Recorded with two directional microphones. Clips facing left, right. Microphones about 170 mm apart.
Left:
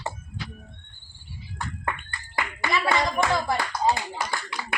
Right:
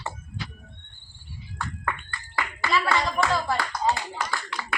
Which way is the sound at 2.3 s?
20° left (ahead or behind).